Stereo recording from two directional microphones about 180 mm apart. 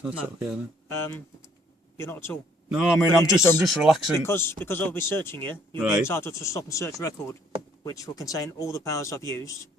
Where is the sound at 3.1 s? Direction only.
15° left (ahead or behind).